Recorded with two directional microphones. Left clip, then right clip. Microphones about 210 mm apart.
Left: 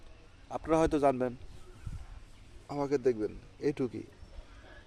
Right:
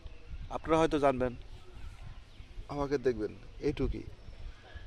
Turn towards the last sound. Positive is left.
turn(degrees=5)  # may be behind; listen again after turning